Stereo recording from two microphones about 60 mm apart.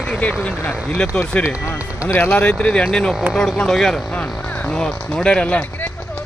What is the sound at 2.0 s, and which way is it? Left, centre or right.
Speech, left.